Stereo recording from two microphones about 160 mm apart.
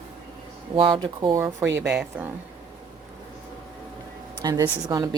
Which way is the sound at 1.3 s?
15° right (ahead or behind).